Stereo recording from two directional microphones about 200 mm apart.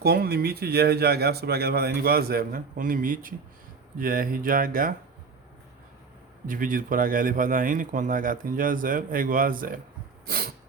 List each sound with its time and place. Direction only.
0.0 s speech: 50° right (ahead or behind)
6.5 s speech: 45° right (ahead or behind)
10.2 s a sound: 50° right (ahead or behind)